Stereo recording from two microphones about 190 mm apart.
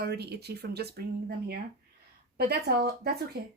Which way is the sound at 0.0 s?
60° right (ahead or behind).